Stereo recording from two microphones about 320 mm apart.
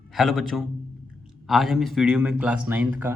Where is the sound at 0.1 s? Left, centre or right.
Centre.